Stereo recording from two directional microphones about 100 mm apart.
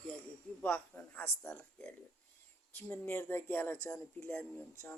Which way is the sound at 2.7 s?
20° left (ahead or behind).